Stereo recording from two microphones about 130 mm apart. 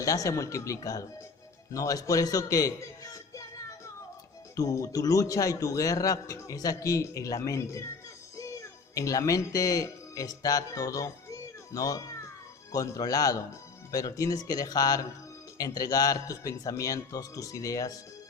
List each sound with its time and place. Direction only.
0.0 s a man's voice: 25° left (ahead or behind)
4.5 s a man's voice: 25° left (ahead or behind)